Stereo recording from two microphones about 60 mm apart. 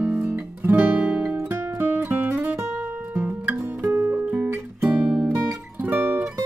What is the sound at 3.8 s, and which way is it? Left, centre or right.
Music, right.